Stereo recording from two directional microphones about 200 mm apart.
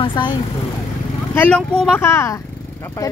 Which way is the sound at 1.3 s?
5° left (ahead or behind).